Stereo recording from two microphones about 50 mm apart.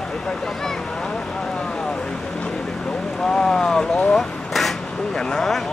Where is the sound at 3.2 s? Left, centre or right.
Centre.